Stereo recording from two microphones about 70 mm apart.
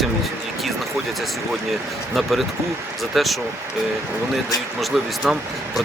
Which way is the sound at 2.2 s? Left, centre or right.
Centre.